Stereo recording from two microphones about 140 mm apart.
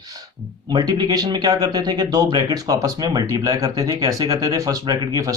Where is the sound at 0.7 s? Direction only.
25° right (ahead or behind).